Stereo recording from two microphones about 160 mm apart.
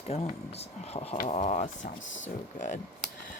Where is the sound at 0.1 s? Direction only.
40° left (ahead or behind).